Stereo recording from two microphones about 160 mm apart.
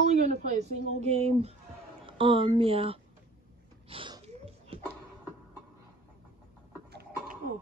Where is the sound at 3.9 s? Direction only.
30° right (ahead or behind).